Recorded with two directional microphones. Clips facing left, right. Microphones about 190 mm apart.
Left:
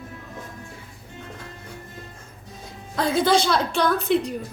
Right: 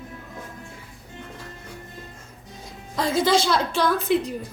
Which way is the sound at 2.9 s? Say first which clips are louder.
Left 1 dB; centre (ahead or behind).